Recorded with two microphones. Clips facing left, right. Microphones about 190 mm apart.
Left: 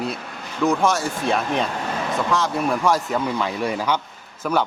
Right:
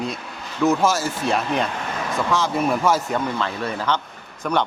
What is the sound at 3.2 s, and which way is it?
A man's voice, 10° left (ahead or behind).